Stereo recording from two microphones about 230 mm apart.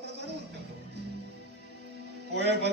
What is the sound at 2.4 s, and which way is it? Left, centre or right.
Speech, right.